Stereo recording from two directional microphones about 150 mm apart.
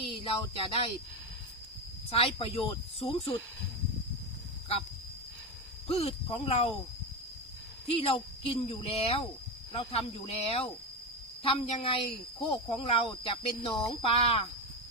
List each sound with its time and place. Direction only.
0.0 s speech: 40° left (ahead or behind)
2.0 s speech: 40° left (ahead or behind)
5.9 s speech: 40° left (ahead or behind)
7.9 s speech: 35° left (ahead or behind)